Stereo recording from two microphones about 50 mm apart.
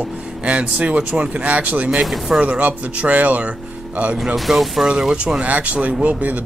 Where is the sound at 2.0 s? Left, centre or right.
Centre.